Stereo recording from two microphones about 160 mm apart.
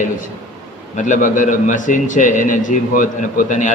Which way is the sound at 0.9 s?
50° left (ahead or behind).